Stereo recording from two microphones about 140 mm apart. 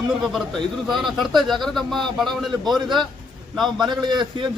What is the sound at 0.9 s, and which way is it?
Speech, centre (ahead or behind).